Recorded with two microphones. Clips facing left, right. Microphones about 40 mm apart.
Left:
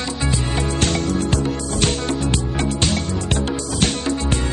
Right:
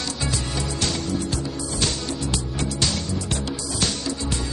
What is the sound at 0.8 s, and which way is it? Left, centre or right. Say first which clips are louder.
Music: left 5 dB; left.